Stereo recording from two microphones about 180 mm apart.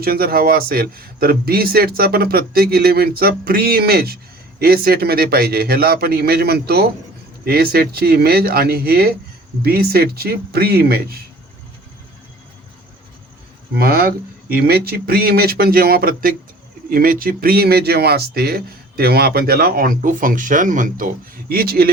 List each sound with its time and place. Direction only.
0.0 s speech: 55° right (ahead or behind)
13.7 s speech: 55° right (ahead or behind)